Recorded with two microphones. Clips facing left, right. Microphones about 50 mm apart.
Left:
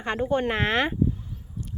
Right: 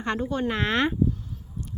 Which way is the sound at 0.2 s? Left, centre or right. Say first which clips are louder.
Left 3 dB; left.